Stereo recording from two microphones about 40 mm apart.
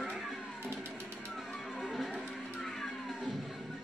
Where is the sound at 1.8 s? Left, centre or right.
Centre.